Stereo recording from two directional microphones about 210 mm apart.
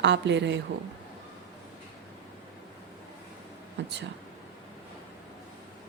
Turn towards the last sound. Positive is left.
turn(degrees=-60)  # may be behind; listen again after turning